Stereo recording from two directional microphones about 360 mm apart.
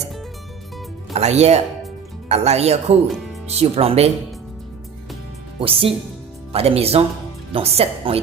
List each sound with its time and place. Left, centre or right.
1.1 s speech: centre
5.5 s speech: centre